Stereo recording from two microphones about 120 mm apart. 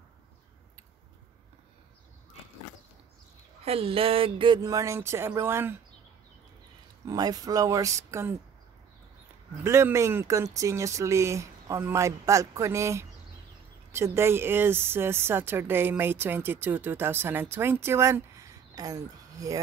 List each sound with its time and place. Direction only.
3.6 s a sound: 55° right (ahead or behind)
4.6 s speech: 25° right (ahead or behind)
7.1 s speech: 30° right (ahead or behind)
9.6 s speech: 20° right (ahead or behind)